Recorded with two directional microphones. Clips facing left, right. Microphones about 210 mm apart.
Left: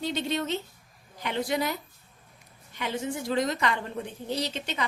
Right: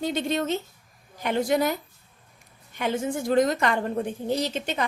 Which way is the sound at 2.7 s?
50° right (ahead or behind).